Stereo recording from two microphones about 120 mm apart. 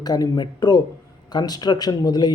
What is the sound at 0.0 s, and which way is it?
A man's voice, 35° left (ahead or behind).